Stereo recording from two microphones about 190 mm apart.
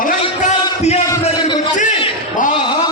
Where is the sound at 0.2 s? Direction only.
35° left (ahead or behind).